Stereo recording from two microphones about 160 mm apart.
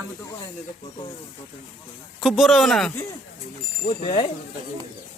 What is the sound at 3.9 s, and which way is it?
Speech, 40° left (ahead or behind).